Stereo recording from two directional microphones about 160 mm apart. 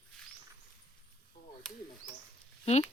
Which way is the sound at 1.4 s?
70° left (ahead or behind).